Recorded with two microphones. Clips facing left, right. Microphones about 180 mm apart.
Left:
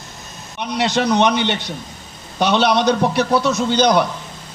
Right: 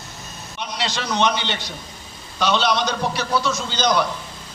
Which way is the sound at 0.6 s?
60° left (ahead or behind).